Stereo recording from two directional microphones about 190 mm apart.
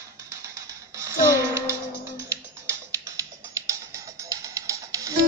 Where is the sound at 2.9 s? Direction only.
15° right (ahead or behind).